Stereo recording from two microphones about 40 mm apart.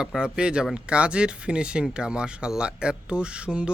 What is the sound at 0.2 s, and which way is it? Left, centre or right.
Speech, right.